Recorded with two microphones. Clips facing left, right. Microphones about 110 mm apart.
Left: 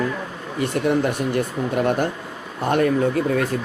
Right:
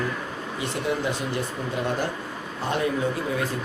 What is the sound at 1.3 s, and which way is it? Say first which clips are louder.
Speech: left 6 dB; 55° left (ahead or behind).